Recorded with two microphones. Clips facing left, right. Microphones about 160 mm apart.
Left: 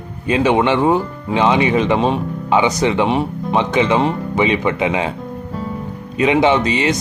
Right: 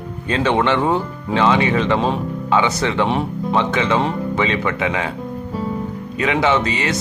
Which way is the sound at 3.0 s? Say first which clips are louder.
Left 2 dB; centre (ahead or behind).